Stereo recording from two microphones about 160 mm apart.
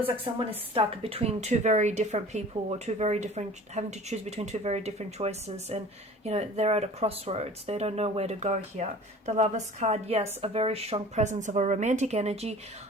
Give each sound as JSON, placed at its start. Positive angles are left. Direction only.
{"t": 0.3, "sound": "a woman's voice", "side_deg": -35}